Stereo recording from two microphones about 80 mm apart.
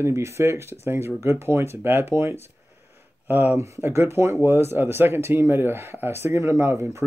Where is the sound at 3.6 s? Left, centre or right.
Right.